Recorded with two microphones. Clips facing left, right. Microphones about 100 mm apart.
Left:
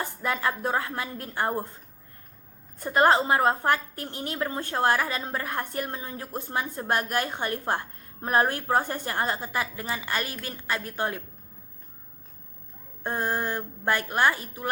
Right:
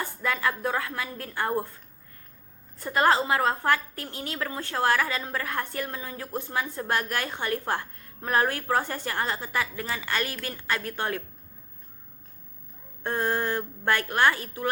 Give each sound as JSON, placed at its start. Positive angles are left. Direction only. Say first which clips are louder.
{"t": 0.0, "sound": "a woman's voice", "louder": "even", "side_deg": 25}
{"t": 2.8, "sound": "a woman's voice", "louder": "left 2 dB", "side_deg": 20}
{"t": 13.0, "sound": "a woman's voice", "louder": "right 1 dB", "side_deg": 15}